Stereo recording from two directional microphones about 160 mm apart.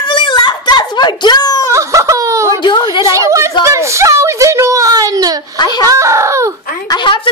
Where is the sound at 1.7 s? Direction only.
20° right (ahead or behind).